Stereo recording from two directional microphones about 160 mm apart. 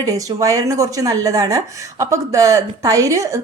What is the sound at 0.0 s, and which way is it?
Speech, 20° right (ahead or behind).